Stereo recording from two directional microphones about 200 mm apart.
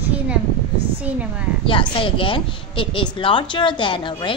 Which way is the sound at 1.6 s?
25° left (ahead or behind).